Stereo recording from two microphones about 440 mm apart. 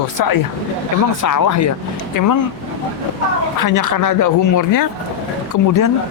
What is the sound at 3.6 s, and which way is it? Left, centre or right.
Speech, left.